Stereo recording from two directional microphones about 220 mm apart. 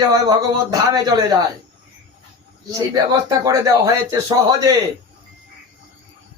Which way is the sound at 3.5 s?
15° right (ahead or behind).